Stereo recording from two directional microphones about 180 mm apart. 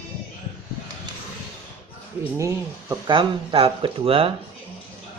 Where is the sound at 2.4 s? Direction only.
15° right (ahead or behind).